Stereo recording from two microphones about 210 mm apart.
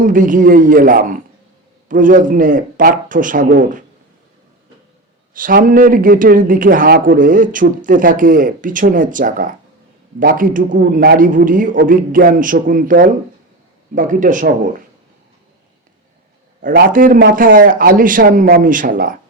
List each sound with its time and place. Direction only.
0.0 s a man's voice: 40° right (ahead or behind)
5.3 s a man's voice: 40° right (ahead or behind)
16.6 s a man's voice: 45° right (ahead or behind)